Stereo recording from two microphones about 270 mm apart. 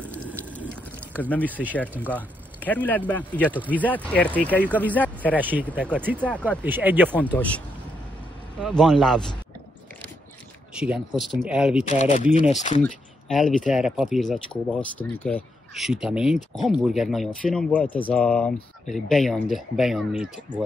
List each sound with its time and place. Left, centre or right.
0.1 s water: centre
1.3 s speech: centre
5.4 s speech: centre
5.7 s speech: centre
6.6 s speech: centre
7.2 s speech: centre
10.7 s speech: centre
12.0 s speech: left
12.8 s speech: centre